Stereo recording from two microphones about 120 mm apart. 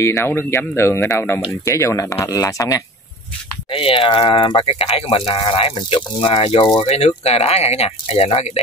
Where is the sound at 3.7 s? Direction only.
50° left (ahead or behind).